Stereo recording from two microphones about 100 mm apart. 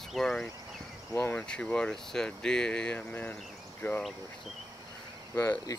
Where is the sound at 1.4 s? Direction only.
10° left (ahead or behind); by 4.0 s 25° left (ahead or behind).